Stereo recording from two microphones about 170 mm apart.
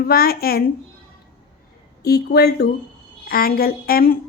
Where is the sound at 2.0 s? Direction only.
70° left (ahead or behind).